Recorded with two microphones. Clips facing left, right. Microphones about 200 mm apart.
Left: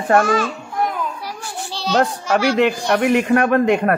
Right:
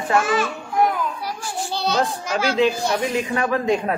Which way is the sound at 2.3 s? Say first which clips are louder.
Left 3 dB; 65° left (ahead or behind).